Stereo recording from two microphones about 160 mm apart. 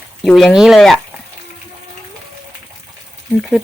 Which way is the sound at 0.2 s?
Centre (ahead or behind).